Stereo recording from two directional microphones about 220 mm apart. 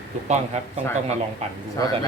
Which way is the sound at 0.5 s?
30° right (ahead or behind).